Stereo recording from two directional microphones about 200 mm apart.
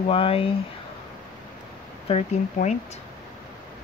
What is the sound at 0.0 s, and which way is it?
Speech, 30° left (ahead or behind).